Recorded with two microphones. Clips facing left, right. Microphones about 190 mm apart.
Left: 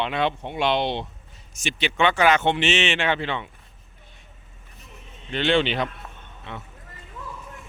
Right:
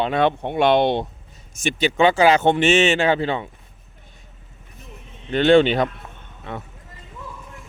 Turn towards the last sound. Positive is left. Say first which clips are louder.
# right 5 dB
turn(degrees=-45)  # may be behind; listen again after turning